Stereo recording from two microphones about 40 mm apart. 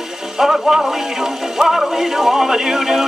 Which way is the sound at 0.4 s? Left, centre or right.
Centre.